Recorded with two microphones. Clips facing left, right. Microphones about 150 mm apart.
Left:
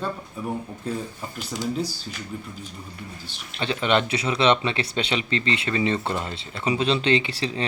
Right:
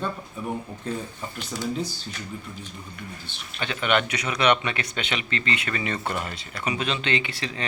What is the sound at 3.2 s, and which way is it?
Speech, 30° left (ahead or behind).